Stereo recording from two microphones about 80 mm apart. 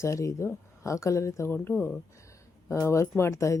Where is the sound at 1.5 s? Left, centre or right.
Left.